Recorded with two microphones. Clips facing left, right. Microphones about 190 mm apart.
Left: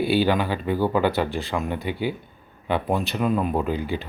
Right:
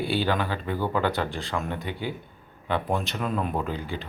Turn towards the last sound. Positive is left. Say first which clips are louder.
# left 5 dB
turn(degrees=15)  # may be behind; listen again after turning